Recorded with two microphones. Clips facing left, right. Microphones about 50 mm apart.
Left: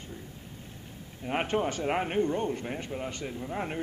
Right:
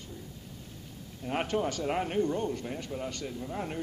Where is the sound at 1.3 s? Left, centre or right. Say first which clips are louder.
Left 2 dB; left.